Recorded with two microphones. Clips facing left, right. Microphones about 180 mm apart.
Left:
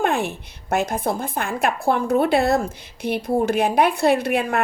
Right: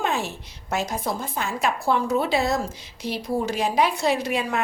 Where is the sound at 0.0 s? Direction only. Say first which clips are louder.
Left 5 dB; 55° left (ahead or behind).